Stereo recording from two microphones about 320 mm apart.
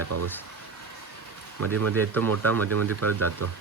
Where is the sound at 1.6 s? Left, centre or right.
Right.